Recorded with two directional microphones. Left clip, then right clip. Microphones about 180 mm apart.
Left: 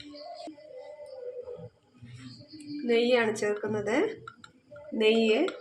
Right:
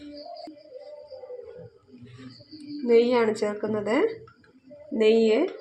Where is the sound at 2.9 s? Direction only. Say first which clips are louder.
Right 4 dB; 40° right (ahead or behind).